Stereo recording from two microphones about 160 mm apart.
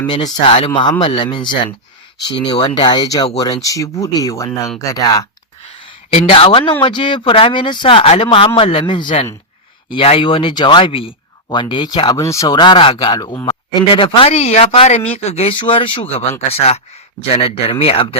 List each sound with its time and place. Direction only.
0.4 s speech: 35° left (ahead or behind)
6.1 s speech: 35° left (ahead or behind)